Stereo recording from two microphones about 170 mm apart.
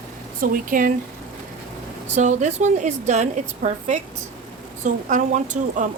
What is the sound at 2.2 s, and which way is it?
Speech, 45° right (ahead or behind).